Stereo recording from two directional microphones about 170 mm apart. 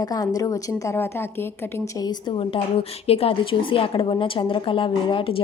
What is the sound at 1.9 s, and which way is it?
A woman's voice, 25° left (ahead or behind).